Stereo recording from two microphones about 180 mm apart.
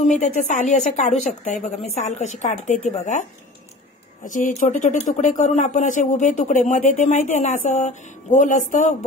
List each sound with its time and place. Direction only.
0.0 s a woman's voice: 40° left (ahead or behind)